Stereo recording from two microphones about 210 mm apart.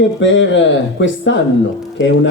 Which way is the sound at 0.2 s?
60° left (ahead or behind).